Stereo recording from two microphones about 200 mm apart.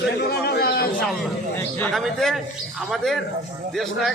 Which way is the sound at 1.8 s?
5° left (ahead or behind).